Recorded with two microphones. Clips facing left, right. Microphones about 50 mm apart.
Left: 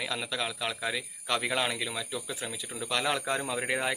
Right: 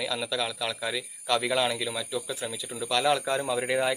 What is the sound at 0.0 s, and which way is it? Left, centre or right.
Speech, left.